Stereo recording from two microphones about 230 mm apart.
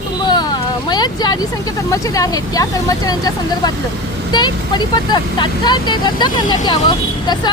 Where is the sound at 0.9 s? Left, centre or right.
Centre.